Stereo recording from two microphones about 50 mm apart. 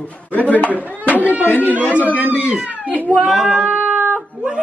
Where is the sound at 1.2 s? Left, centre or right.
Right.